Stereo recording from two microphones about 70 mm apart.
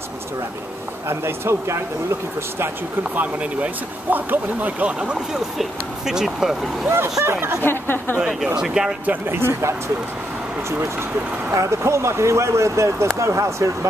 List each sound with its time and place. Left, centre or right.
1.0 s speech: right
3.0 s speech: right
5.6 s speech: centre
7.2 s speech: right
7.6 s speech: left
8.2 s speech: centre
9.0 s speech: right
9.4 s speech: right
11.5 s speech: right